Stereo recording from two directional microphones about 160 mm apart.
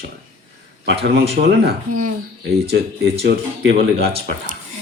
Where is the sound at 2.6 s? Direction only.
85° right.